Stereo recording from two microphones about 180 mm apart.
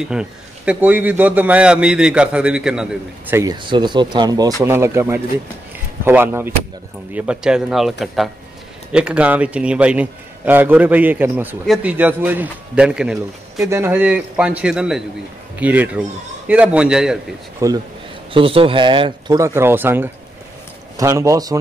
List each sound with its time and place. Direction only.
0.1 s a man's voice: 5° right (ahead or behind)
3.6 s a man's voice: 25° right (ahead or behind); by 7.9 s 5° right (ahead or behind)
8.9 s a man's voice: 5° right (ahead or behind)
17.6 s a man's voice: 15° right (ahead or behind)
18.3 s speech: 30° right (ahead or behind)